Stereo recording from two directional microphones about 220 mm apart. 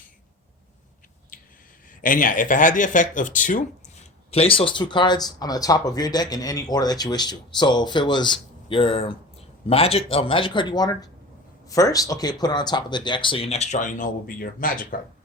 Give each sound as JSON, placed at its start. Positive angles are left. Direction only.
{"t": 1.3, "sound": "a sound", "side_deg": 35}
{"t": 2.0, "sound": "speech", "side_deg": 35}
{"t": 4.3, "sound": "speech", "side_deg": 25}